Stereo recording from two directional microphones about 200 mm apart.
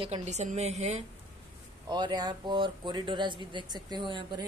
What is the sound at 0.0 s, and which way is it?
A woman's voice, 35° right (ahead or behind).